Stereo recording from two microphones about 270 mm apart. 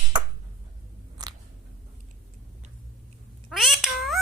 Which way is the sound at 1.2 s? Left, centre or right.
Centre.